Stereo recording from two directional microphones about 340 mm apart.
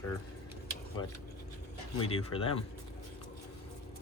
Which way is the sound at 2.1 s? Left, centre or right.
Centre.